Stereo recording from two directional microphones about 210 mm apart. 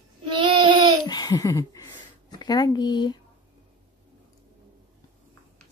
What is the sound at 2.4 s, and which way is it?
Speech, 20° left (ahead or behind).